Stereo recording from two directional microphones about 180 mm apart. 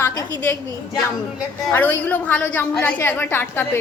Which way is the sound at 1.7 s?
10° left (ahead or behind).